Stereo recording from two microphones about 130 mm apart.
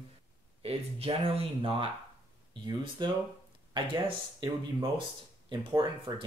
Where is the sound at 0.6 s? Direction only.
50° right (ahead or behind).